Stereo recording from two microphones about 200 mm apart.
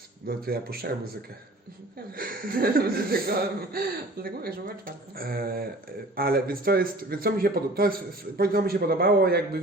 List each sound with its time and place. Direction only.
0.3 s a man's voice: 50° right (ahead or behind)
2.1 s a man's voice: 45° right (ahead or behind)